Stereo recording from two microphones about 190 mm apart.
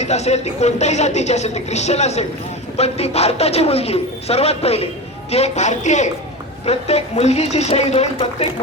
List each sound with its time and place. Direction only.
0.0 s speech: 35° left (ahead or behind)